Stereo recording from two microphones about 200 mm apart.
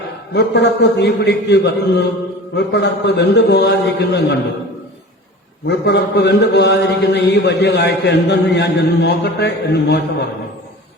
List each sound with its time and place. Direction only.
0.3 s a man's voice: 60° left (ahead or behind)
5.6 s a man's voice: 55° left (ahead or behind)